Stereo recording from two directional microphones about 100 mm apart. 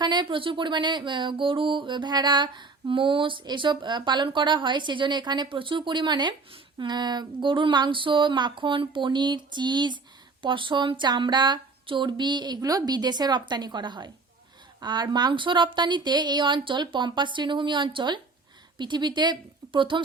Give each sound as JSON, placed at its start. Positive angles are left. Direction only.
{"t": 0.0, "sound": "speech", "side_deg": -50}